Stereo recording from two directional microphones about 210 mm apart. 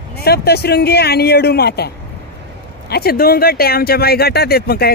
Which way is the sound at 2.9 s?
45° left (ahead or behind).